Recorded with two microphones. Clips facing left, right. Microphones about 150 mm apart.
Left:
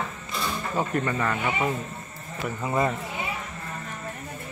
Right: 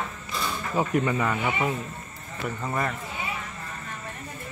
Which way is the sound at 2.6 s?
15° left (ahead or behind).